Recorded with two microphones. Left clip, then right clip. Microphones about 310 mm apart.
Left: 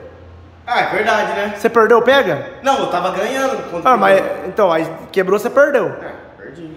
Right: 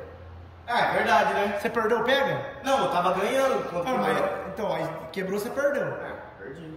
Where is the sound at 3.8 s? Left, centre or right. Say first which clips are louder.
Left 17 dB; centre.